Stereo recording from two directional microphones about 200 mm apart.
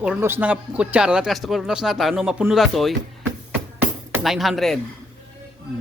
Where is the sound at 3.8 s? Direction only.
5° right (ahead or behind).